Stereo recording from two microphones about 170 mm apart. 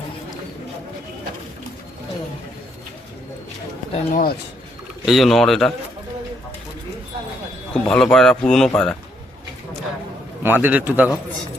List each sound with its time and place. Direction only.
3.9 s speech: 55° left (ahead or behind)
5.0 s a man's voice: centre (ahead or behind)
7.7 s a man's voice: 5° left (ahead or behind)
10.4 s a man's voice: 10° right (ahead or behind)